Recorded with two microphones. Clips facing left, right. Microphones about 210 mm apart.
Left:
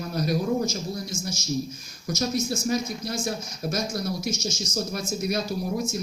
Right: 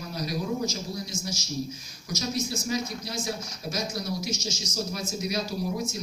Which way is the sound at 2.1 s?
50° left (ahead or behind).